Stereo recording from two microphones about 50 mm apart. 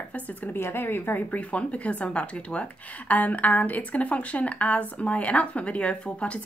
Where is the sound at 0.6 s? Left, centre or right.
Left.